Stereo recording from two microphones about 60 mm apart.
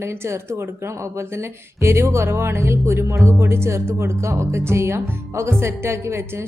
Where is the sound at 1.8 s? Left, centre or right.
Right.